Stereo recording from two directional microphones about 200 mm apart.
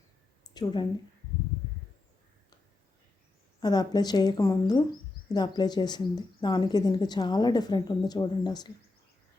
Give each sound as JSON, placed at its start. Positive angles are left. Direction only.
{"t": 0.5, "sound": "speech", "side_deg": 20}
{"t": 3.6, "sound": "speech", "side_deg": 20}